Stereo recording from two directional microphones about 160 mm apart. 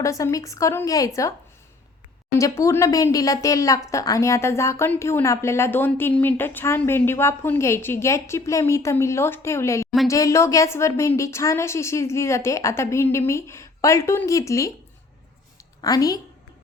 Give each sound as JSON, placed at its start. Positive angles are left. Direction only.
{"t": 0.0, "sound": "speech", "side_deg": 20}
{"t": 2.4, "sound": "a woman's voice", "side_deg": 15}
{"t": 15.8, "sound": "speech", "side_deg": 25}